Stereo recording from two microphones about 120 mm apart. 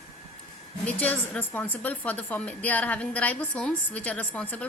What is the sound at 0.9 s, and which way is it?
A woman's voice, 15° left (ahead or behind).